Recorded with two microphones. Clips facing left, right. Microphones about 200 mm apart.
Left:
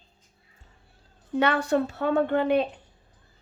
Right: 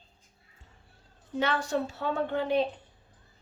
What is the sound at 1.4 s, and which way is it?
A woman's voice, 60° left (ahead or behind).